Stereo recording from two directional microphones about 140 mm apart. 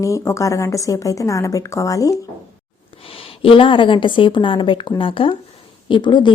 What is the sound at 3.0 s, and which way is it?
A woman's voice, 40° left (ahead or behind).